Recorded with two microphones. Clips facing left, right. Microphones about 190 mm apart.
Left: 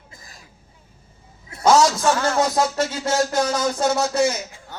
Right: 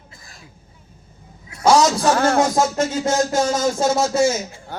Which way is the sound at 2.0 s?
40° right (ahead or behind).